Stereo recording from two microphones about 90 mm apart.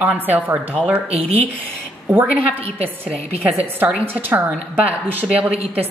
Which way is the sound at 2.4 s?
90° right.